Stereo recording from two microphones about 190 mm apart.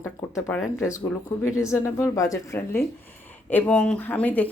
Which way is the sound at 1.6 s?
15° left (ahead or behind).